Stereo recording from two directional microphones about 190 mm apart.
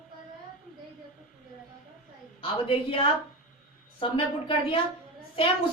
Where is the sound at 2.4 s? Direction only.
30° left (ahead or behind).